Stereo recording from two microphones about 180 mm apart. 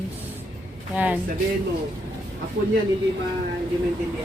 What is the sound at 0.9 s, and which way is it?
Speech, 10° right (ahead or behind).